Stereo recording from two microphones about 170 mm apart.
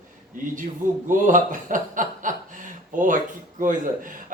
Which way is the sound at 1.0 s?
50° right (ahead or behind).